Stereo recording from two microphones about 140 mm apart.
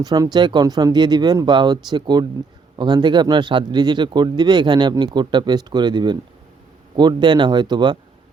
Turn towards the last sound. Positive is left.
turn(degrees=-30)  # may be behind; listen again after turning